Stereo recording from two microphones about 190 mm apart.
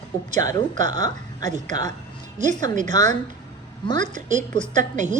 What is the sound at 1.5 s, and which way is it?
Speech, 40° right (ahead or behind).